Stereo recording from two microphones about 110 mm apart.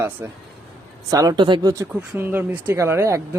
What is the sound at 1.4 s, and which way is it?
Speech, 45° right (ahead or behind).